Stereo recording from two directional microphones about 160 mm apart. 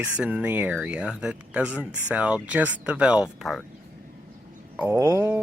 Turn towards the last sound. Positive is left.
turn(degrees=-15)  # may be behind; listen again after turning